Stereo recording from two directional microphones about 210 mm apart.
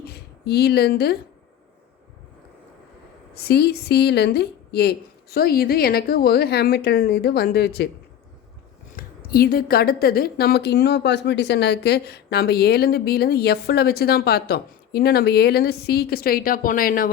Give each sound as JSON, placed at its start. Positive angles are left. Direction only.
{"t": 0.0, "sound": "a woman's voice", "side_deg": 50}
{"t": 3.3, "sound": "speech", "side_deg": 50}
{"t": 9.0, "sound": "speech", "side_deg": 45}